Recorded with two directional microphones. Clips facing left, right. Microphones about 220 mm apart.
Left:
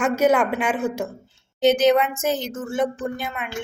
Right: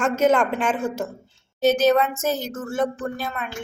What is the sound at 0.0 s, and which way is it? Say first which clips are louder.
Speech: even; 10° left (ahead or behind).